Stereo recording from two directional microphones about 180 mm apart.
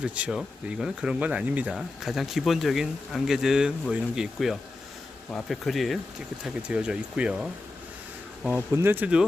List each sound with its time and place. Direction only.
0.0 s speech: 5° right (ahead or behind)